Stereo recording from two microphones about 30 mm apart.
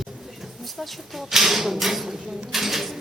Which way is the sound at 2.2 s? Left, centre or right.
Centre.